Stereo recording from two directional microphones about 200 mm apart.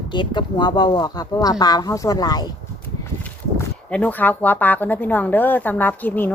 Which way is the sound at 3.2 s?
5° left (ahead or behind).